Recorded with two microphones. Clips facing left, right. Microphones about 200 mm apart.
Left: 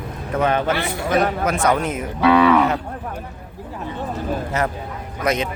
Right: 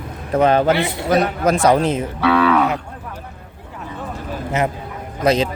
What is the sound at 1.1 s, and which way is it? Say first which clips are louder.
Speech: right 3 dB; 40° right (ahead or behind).